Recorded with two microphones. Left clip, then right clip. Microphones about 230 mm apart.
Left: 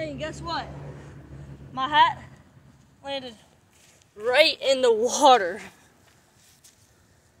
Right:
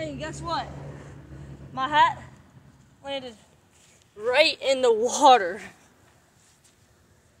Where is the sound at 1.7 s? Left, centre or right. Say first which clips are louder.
Left 1 dB; centre.